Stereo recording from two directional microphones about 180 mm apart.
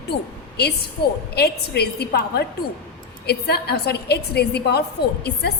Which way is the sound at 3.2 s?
60° left (ahead or behind).